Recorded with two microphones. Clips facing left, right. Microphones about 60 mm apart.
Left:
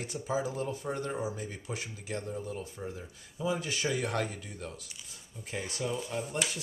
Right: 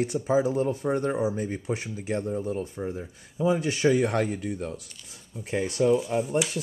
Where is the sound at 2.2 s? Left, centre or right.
Centre.